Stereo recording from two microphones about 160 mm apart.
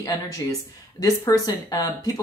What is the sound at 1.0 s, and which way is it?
Speech, 20° left (ahead or behind).